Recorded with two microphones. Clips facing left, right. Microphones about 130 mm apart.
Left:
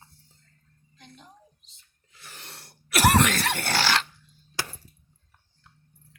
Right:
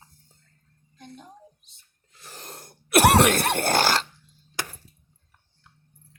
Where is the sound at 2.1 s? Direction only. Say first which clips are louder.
Right 5 dB; 40° right (ahead or behind).